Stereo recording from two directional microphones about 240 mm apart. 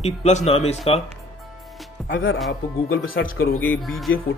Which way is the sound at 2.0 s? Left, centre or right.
Left.